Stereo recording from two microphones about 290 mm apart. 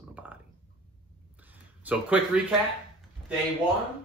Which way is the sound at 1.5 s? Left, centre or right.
Centre.